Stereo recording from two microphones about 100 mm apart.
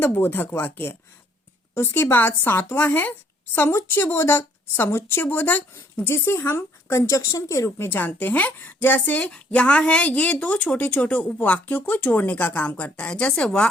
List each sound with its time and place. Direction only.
0.0 s speech: 20° left (ahead or behind)